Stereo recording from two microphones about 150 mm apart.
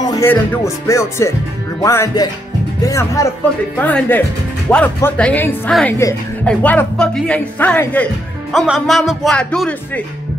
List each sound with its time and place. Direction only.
0.0 s music: 25° left (ahead or behind)
3.8 s speech: 10° left (ahead or behind)
8.5 s speech: centre (ahead or behind)